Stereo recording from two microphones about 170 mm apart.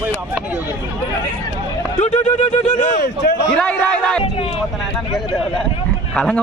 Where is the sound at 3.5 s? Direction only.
5° left (ahead or behind).